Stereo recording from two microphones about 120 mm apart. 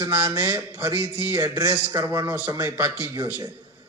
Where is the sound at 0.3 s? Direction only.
25° right (ahead or behind).